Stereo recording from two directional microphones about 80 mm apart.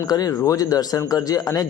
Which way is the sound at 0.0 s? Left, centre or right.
Left.